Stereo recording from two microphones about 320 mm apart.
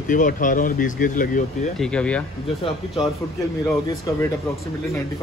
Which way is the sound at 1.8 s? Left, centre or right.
Centre.